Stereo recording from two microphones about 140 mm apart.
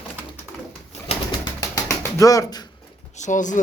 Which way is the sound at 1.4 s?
25° left (ahead or behind).